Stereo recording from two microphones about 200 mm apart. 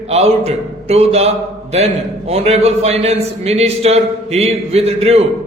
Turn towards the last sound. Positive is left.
turn(degrees=-30)  # may be behind; listen again after turning